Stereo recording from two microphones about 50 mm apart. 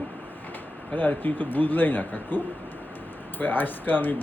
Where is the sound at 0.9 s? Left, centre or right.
Left.